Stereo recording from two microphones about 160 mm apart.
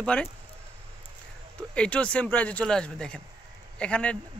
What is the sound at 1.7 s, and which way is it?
Speech, 5° left (ahead or behind).